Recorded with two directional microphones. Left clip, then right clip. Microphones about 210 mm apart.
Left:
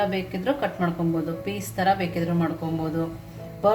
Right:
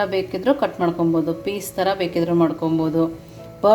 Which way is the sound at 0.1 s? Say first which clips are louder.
Right 7 dB; 30° right (ahead or behind).